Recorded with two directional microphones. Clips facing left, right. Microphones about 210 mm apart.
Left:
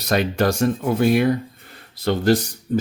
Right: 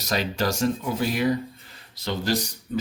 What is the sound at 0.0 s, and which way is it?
Speech, 55° left (ahead or behind).